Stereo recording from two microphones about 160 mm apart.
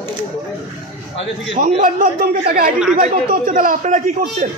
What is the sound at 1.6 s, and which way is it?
A man's voice, 60° right (ahead or behind).